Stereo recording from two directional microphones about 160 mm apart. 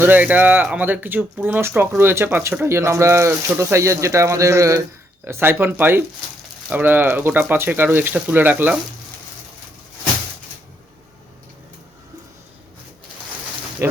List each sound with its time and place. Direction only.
0.0 s speech: 10° right (ahead or behind)